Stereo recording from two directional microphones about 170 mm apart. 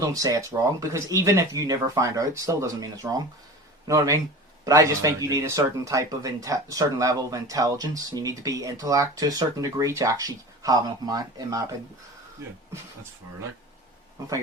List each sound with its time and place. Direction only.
0.0 s speech: 20° right (ahead or behind)